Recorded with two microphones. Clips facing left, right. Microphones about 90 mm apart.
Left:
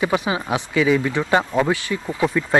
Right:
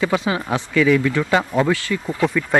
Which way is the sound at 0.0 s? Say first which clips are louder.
Right 1 dB; 15° left (ahead or behind).